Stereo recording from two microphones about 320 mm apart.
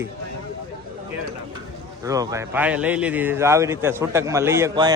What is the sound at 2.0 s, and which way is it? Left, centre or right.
A man's voice, centre.